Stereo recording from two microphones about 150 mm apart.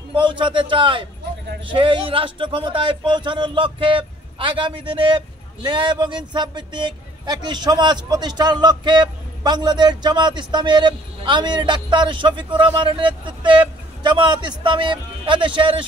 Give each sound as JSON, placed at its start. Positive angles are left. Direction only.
{"t": 0.1, "sound": "a man's voice", "side_deg": -35}